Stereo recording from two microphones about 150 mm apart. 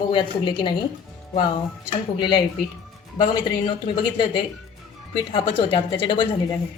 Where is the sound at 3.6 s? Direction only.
30° left (ahead or behind).